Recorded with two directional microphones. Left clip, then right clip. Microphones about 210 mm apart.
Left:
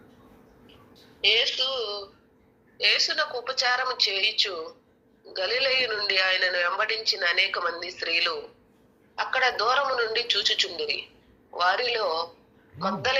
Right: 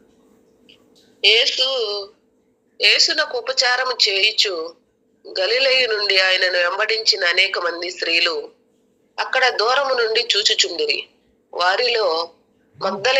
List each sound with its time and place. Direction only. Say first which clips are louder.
1.2 s speech: right 7 dB; 45° right (ahead or behind)